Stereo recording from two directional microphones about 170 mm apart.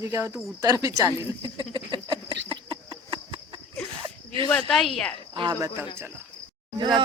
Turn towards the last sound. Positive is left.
turn(degrees=-30)  # may be behind; listen again after turning